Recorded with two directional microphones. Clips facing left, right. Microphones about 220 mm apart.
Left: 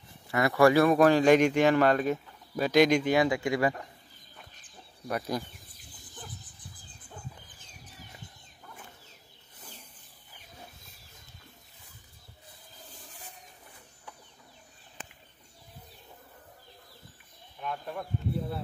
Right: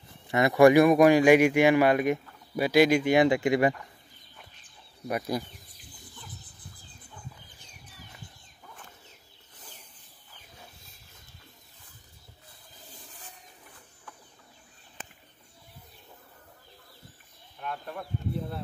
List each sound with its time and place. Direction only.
0.3 s a man's voice: 20° right (ahead or behind)
3.3 s speech: 20° right (ahead or behind)
5.0 s a man's voice: 10° right (ahead or behind)
17.6 s a sound: centre (ahead or behind)